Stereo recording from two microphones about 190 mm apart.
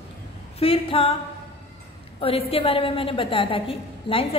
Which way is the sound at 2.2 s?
30° left (ahead or behind).